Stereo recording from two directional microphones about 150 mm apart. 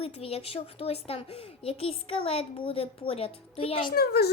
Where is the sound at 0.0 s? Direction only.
40° left (ahead or behind).